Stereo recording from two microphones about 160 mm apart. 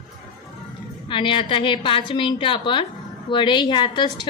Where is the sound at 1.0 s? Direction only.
30° left (ahead or behind).